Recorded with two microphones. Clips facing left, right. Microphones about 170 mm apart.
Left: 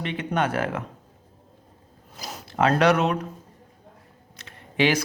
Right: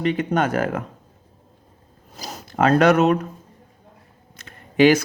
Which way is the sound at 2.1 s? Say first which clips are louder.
Right 3 dB; 40° right (ahead or behind).